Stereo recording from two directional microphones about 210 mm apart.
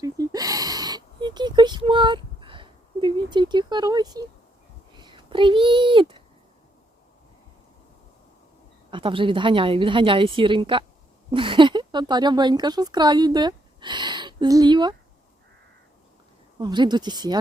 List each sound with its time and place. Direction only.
0.0 s a sound: 15° right (ahead or behind)
4.9 s speech: 20° right (ahead or behind)
8.9 s a woman's voice: 25° right (ahead or behind)
16.6 s a woman's voice: 20° right (ahead or behind)